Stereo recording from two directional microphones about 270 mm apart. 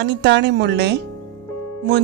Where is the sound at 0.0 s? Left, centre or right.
Right.